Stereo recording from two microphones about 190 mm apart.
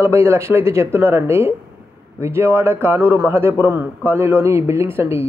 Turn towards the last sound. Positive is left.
turn(degrees=-10)  # may be behind; listen again after turning